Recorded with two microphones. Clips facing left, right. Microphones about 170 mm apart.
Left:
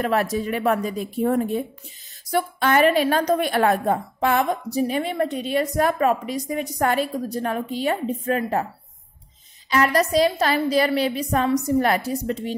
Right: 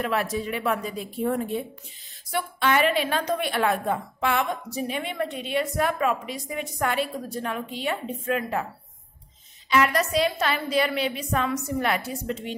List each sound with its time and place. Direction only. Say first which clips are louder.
0.0 s a woman's voice: left 4 dB; 40° left (ahead or behind)
9.7 s a woman's voice: left 3 dB; 40° left (ahead or behind)